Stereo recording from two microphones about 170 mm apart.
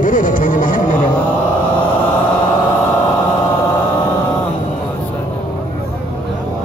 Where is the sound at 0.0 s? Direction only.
50° left (ahead or behind).